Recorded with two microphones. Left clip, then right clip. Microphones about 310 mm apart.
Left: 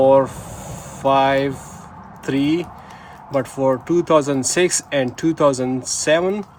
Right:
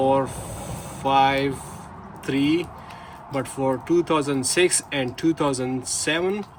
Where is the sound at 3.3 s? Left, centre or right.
Left.